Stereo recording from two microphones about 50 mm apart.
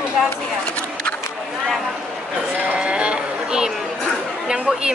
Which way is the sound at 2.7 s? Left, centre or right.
Right.